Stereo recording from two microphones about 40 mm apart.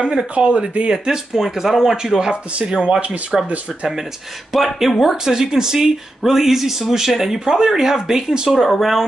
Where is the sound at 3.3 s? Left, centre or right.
Centre.